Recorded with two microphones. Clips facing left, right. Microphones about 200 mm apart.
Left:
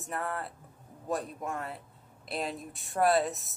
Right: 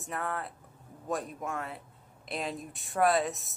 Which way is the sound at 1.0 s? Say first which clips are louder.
Left 1 dB; centre (ahead or behind).